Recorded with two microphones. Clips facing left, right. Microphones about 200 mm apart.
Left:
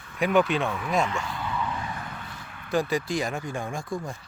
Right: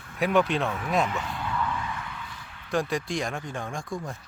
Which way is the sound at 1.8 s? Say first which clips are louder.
Even; 40° left (ahead or behind).